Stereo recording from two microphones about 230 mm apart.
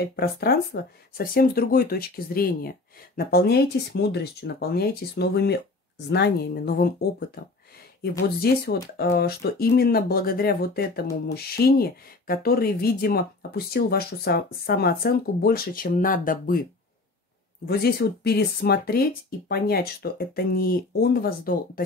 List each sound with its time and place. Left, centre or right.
0.1 s speech: left
17.6 s speech: left